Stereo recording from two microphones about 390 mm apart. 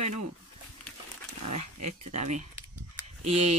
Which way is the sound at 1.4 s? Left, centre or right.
Right.